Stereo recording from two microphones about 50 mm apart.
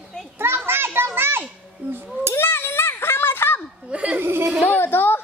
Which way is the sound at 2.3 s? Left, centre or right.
Left.